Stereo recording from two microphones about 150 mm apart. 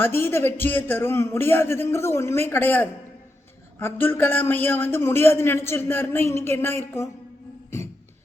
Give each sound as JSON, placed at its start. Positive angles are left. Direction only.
{"t": 0.0, "sound": "a man's voice", "side_deg": 15}